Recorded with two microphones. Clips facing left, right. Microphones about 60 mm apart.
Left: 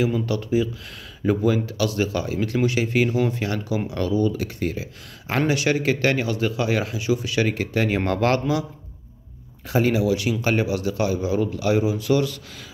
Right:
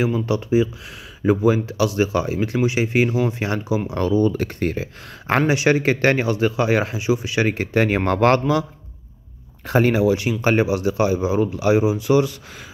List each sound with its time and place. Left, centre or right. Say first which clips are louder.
0.0 s speech: right 2 dB; right
5.5 s speech: right 2 dB; right
9.7 s speech: right 3 dB; right